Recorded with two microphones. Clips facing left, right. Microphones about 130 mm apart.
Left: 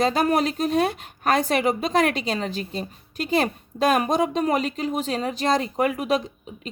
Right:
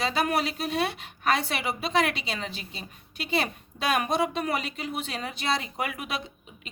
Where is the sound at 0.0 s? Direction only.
45° left (ahead or behind).